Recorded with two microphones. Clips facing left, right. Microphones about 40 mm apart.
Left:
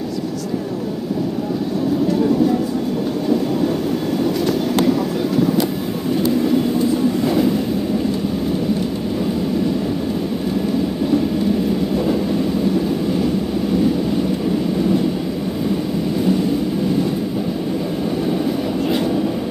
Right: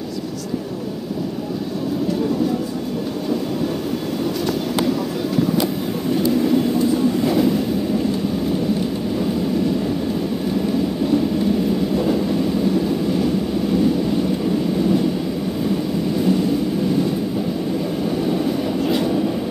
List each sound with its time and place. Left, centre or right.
6.3 s vehicle: centre
11.9 s train: centre
16.2 s vehicle: centre
18.9 s train: centre